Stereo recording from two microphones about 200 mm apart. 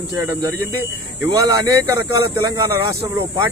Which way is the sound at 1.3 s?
15° right (ahead or behind).